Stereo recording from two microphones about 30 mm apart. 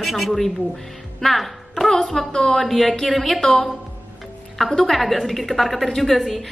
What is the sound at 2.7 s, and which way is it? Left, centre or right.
A woman's voice, centre.